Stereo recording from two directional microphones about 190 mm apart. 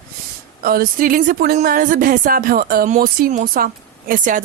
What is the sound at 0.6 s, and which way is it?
A woman's voice, 50° right (ahead or behind).